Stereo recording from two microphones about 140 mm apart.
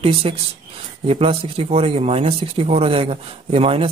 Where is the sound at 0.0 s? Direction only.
45° right (ahead or behind).